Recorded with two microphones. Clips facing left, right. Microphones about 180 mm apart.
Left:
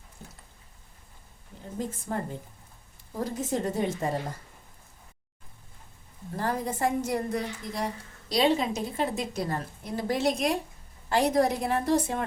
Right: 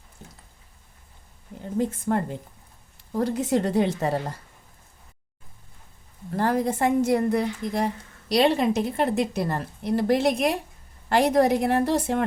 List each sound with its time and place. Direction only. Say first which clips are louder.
1.8 s a woman's voice: right 7 dB; 65° right (ahead or behind)
6.3 s a woman's voice: right 7 dB; 70° right (ahead or behind)